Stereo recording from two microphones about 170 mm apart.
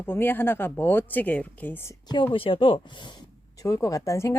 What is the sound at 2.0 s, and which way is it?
Speech, 25° left (ahead or behind).